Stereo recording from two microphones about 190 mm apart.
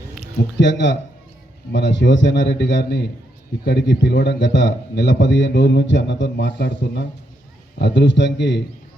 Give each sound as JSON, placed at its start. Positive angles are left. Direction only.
{"t": 0.3, "sound": "a man's voice", "side_deg": 70}